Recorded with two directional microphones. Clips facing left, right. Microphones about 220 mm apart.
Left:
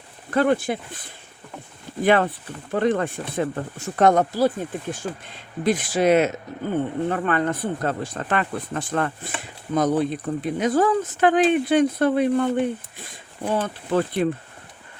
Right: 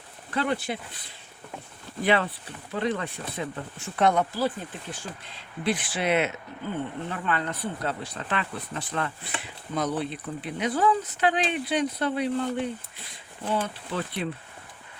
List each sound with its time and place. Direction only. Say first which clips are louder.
0.3 s speech: left 8 dB; 50° left (ahead or behind)